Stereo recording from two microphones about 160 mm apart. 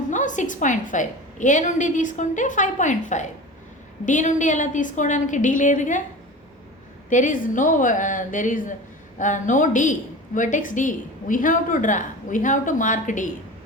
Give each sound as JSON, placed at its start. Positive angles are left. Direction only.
{"t": 0.1, "sound": "a woman's voice", "side_deg": 50}
{"t": 7.1, "sound": "a woman's voice", "side_deg": 55}